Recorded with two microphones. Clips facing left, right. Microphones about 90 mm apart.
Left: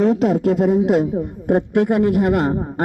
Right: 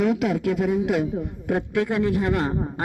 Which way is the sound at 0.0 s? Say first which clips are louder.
Left 6 dB; 35° left (ahead or behind).